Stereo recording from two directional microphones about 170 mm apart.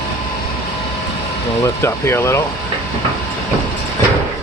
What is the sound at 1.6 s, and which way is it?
Speech, 15° left (ahead or behind).